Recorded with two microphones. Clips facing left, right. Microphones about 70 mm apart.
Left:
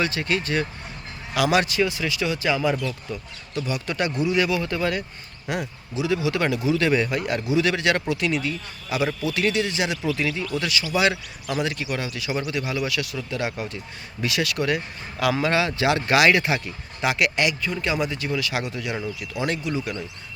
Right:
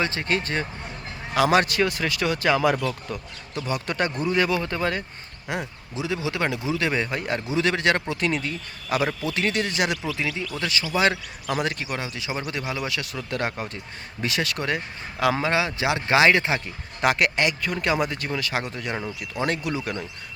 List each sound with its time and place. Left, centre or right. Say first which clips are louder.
0.0 s speech: left 1 dB; right
3.5 s speech: even; right
10.2 s speech: left 2 dB; right
10.5 s speech: left 2 dB; right
13.3 s speech: right 1 dB; right
17.0 s speech: right 1 dB; right
17.6 s speech: right 1 dB; right